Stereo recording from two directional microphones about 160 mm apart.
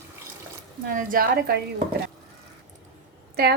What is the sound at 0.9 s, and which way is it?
Speech, 60° right (ahead or behind).